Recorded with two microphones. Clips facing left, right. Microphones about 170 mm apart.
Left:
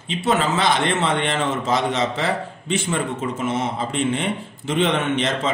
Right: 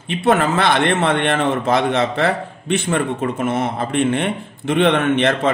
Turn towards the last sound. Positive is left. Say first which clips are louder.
# right 5 dB
turn(degrees=-60)  # may be behind; listen again after turning